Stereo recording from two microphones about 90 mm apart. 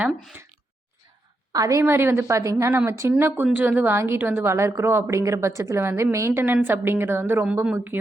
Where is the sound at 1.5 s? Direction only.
40° right (ahead or behind).